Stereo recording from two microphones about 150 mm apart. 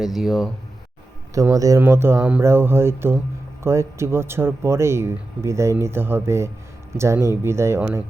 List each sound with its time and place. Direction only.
0.0 s speech: centre (ahead or behind)
1.3 s speech: 20° right (ahead or behind)